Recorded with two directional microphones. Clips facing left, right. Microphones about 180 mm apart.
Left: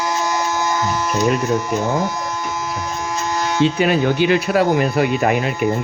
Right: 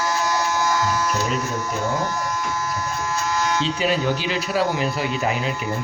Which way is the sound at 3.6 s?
60° left (ahead or behind).